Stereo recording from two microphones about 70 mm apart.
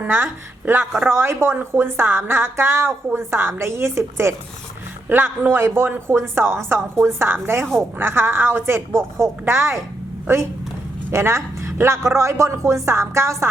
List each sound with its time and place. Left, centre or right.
0.1 s a woman's voice: right
5.0 s a woman's voice: right
11.1 s speech: right